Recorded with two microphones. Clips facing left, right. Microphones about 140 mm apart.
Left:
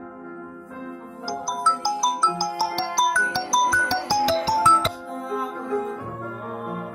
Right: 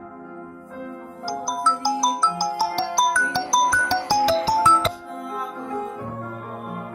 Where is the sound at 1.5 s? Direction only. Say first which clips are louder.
Right 2 dB; 50° right (ahead or behind).